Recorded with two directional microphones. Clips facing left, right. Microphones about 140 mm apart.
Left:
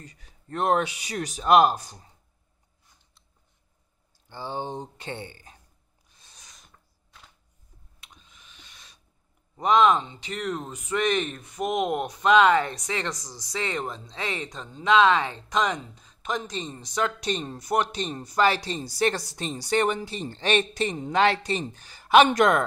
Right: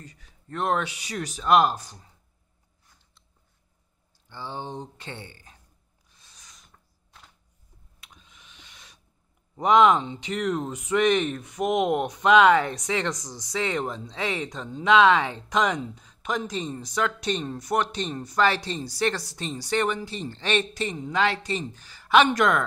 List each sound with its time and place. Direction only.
0.0 s speech: 40° left (ahead or behind)
0.6 s speech: 15° left (ahead or behind)
4.3 s speech: 15° left (ahead or behind)
8.3 s a sound: 15° right (ahead or behind)
9.6 s speech: 15° right (ahead or behind); by 20.8 s 15° left (ahead or behind)
20.8 s speech: 55° left (ahead or behind)
21.9 s a sound: 15° left (ahead or behind)